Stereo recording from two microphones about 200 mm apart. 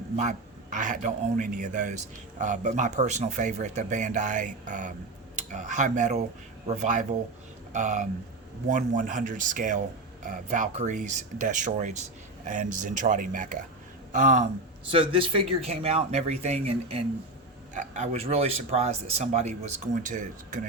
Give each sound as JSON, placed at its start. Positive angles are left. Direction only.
{"t": 0.2, "sound": "speech", "side_deg": -40}
{"t": 14.8, "sound": "speech", "side_deg": -25}